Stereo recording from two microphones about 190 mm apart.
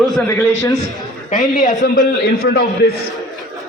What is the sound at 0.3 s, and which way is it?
Speech, 15° left (ahead or behind).